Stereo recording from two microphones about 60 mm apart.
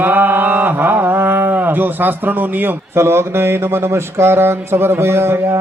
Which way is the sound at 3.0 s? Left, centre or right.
Right.